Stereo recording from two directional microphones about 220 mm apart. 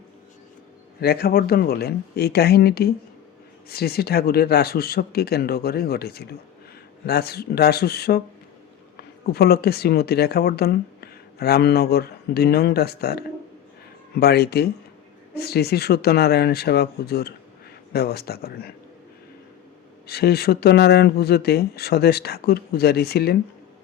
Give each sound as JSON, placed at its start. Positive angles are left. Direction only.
{"t": 1.0, "sound": "speech", "side_deg": 45}
{"t": 20.1, "sound": "speech", "side_deg": 45}